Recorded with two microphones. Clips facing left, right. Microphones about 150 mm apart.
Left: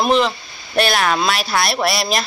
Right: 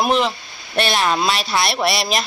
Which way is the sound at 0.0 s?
Centre (ahead or behind).